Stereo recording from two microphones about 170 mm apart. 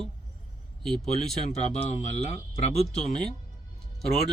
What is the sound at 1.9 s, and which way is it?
Speech, 40° left (ahead or behind).